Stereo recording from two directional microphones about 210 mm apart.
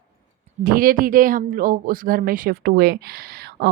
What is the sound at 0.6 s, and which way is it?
Speech, 40° right (ahead or behind).